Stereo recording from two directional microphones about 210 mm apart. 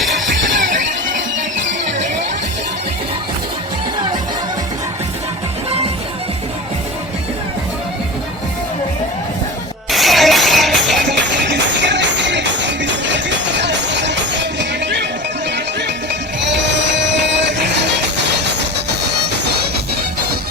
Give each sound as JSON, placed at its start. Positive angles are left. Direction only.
{"t": 9.9, "sound": "music", "side_deg": 0}
{"t": 11.5, "sound": "music", "side_deg": -55}